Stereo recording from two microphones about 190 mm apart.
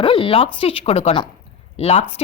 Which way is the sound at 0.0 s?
30° left (ahead or behind).